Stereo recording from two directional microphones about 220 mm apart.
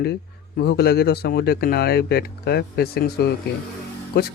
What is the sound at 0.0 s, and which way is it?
Speech, 45° left (ahead or behind).